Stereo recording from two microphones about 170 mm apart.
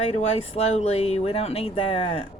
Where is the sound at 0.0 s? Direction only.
40° left (ahead or behind).